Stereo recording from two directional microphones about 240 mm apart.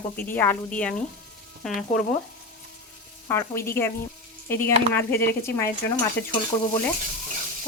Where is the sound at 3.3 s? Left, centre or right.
Centre.